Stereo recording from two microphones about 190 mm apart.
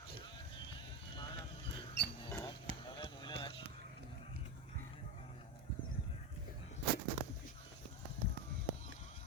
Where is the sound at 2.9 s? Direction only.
25° left (ahead or behind).